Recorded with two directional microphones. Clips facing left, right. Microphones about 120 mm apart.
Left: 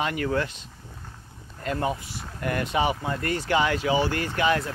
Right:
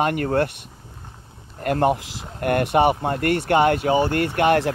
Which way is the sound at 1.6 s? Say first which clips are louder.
Right 8 dB; 65° right (ahead or behind).